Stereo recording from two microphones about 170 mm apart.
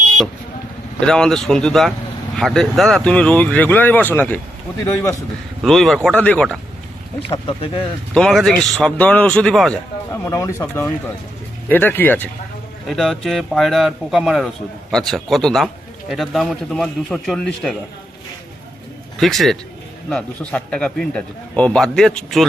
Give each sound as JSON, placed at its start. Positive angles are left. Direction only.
{"t": 0.9, "sound": "a man's voice", "side_deg": 5}
{"t": 5.6, "sound": "a man's voice", "side_deg": 0}
{"t": 7.3, "sound": "speech", "side_deg": 30}
{"t": 8.1, "sound": "a man's voice", "side_deg": 0}
{"t": 10.1, "sound": "a man's voice", "side_deg": 15}
{"t": 19.2, "sound": "a man's voice", "side_deg": 0}